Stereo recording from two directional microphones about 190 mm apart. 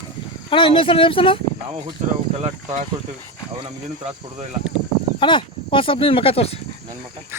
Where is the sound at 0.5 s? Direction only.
25° left (ahead or behind).